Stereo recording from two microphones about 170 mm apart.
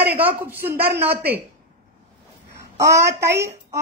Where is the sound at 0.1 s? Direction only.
10° right (ahead or behind).